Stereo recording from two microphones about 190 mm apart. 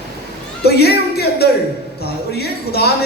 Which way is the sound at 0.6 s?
55° left (ahead or behind).